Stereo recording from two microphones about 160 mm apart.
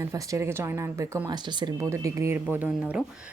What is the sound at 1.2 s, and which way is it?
A woman's voice, 30° right (ahead or behind).